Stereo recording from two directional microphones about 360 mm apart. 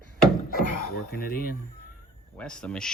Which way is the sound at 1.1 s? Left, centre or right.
Left.